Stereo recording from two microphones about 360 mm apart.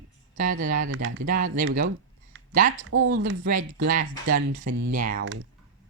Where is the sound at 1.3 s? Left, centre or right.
Right.